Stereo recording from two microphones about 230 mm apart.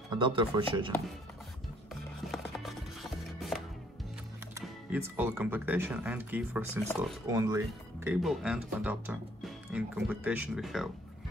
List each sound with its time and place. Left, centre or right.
0.2 s speech: right
2.2 s music: centre
4.6 s speech: centre
8.2 s speech: centre